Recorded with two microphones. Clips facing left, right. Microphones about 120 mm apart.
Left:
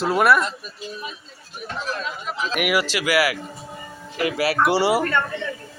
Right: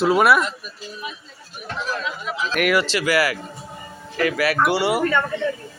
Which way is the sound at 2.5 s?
10° left (ahead or behind).